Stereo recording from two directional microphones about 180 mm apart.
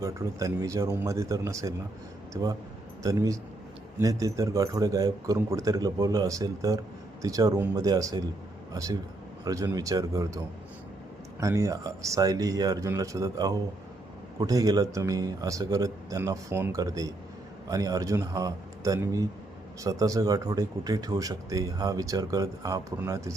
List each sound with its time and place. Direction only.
0.0 s a man's voice: 15° right (ahead or behind)